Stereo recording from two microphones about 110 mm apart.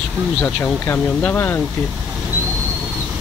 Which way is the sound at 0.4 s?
15° left (ahead or behind).